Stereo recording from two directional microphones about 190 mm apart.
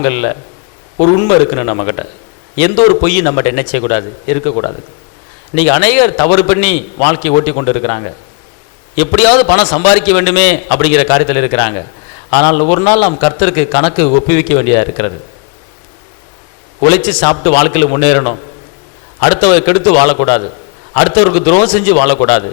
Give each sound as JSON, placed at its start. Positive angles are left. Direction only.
{"t": 0.0, "sound": "a man's voice", "side_deg": 15}
{"t": 5.5, "sound": "a man's voice", "side_deg": 15}
{"t": 16.9, "sound": "a man's voice", "side_deg": 10}